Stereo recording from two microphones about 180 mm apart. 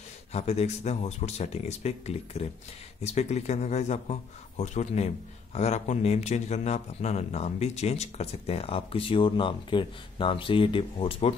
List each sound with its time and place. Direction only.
0.3 s speech: 35° left (ahead or behind)